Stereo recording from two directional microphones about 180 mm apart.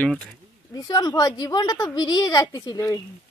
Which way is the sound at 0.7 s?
20° left (ahead or behind).